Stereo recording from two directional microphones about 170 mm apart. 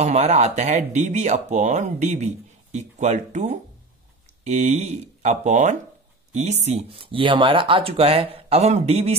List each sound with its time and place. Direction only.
0.0 s speech: 40° right (ahead or behind)